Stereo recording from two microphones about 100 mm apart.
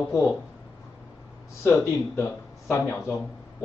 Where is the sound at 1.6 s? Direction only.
25° left (ahead or behind).